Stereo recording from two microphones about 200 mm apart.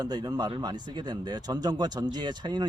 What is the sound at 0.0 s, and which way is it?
Speech, 20° right (ahead or behind).